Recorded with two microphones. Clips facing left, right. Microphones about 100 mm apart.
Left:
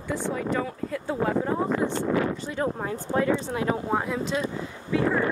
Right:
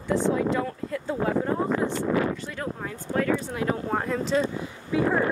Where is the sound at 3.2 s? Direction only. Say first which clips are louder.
Even; 20° left (ahead or behind).